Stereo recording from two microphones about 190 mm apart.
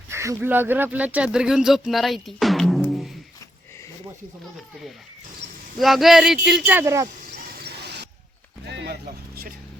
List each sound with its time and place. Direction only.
0.1 s speech: 15° right (ahead or behind)
5.8 s speech: centre (ahead or behind); by 7.1 s 15° right (ahead or behind)
7.6 s a sound: 60° right (ahead or behind)
9.0 s speech: 50° right (ahead or behind)